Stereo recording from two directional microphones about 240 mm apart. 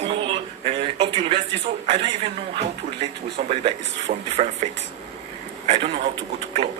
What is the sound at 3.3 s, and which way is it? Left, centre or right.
A man's voice, right.